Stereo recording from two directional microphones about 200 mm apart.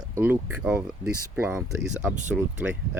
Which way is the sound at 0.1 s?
10° right (ahead or behind).